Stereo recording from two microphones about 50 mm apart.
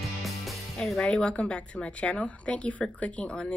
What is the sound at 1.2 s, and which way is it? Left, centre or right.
Speech, left.